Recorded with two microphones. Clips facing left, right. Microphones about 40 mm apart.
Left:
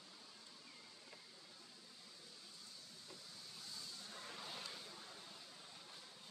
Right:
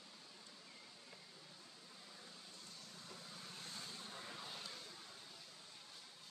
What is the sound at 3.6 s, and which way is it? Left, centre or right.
Vehicle, right.